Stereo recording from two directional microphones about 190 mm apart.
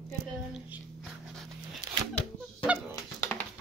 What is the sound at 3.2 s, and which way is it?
Music, 10° left (ahead or behind).